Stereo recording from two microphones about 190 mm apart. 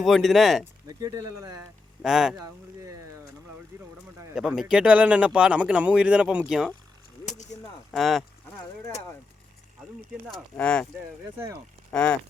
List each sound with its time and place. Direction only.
0.0 s speech: centre (ahead or behind)
0.6 s speech: 20° right (ahead or behind)
2.0 s speech: centre (ahead or behind)
3.7 s vehicle: 15° right (ahead or behind)
4.4 s speech: 5° right (ahead or behind)
7.3 s a sound: 40° left (ahead or behind)
7.9 s speech: centre (ahead or behind)
10.3 s speech: 5° left (ahead or behind)
11.9 s speech: 5° left (ahead or behind)